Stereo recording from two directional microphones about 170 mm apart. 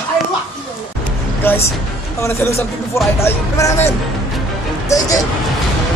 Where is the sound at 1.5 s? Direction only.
10° left (ahead or behind).